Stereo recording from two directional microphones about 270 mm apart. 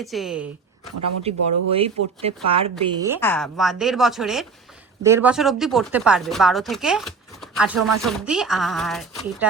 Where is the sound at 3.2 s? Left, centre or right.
Centre.